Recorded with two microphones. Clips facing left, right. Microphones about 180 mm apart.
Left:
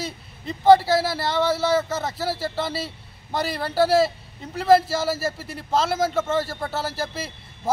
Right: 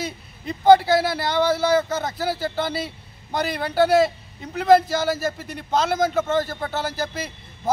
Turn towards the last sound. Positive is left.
turn(degrees=5)  # may be behind; listen again after turning